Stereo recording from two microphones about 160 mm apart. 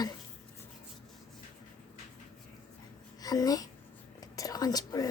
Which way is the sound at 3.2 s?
25° left (ahead or behind).